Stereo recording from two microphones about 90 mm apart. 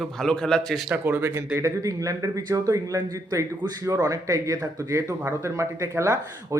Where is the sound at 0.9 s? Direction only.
25° right (ahead or behind).